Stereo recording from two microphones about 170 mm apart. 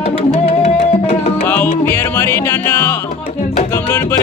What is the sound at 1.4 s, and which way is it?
Music, 10° left (ahead or behind).